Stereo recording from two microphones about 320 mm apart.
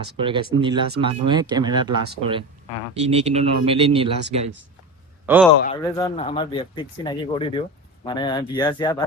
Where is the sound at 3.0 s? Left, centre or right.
Centre.